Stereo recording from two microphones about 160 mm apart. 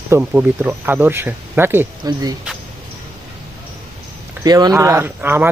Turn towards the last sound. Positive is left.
turn(degrees=-10)  # may be behind; listen again after turning